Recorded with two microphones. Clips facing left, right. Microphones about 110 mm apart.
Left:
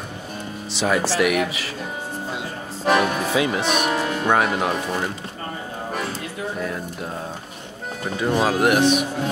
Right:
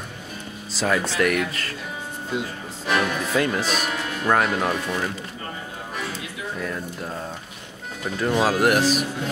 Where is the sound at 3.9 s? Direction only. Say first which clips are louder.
Left 6 dB; 35° left (ahead or behind).